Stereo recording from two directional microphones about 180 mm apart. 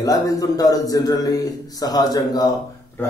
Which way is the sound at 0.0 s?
20° left (ahead or behind).